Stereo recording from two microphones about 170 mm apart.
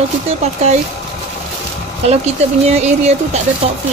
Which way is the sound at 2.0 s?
40° right (ahead or behind).